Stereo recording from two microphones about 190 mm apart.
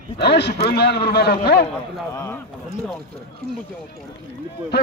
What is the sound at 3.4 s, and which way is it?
Speech, 55° right (ahead or behind).